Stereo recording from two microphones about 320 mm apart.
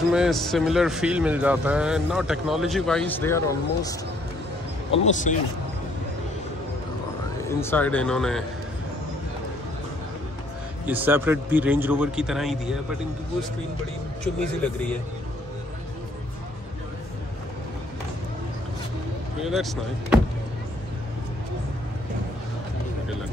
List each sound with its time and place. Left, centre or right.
0.1 s a man's voice: centre
4.9 s a man's voice: left
7.4 s a man's voice: centre
10.9 s a man's voice: centre
14.2 s a man's voice: centre
19.4 s a man's voice: centre